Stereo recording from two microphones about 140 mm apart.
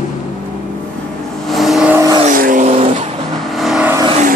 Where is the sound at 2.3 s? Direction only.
75° right (ahead or behind).